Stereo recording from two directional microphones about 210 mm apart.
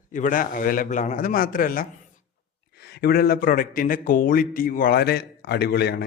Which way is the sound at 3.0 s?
45° left (ahead or behind).